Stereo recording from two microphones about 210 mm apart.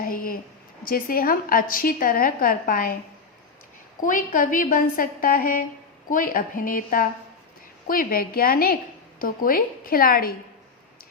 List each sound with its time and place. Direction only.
0.0 s a sound: 45° left (ahead or behind)
0.9 s a woman's voice: 40° left (ahead or behind)
4.0 s a woman's voice: 40° left (ahead or behind)